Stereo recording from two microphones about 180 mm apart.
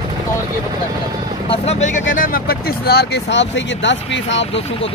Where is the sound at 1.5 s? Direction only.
40° left (ahead or behind); by 4.5 s 90° left.